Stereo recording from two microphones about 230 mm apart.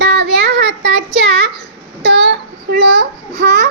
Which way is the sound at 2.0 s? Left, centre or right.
Right.